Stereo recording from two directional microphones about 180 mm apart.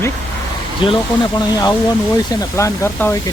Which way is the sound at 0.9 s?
25° left (ahead or behind).